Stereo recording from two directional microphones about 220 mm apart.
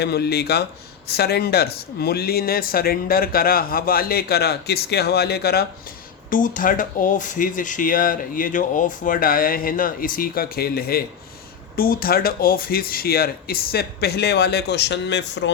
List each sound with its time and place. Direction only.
0.0 s speech: 45° left (ahead or behind)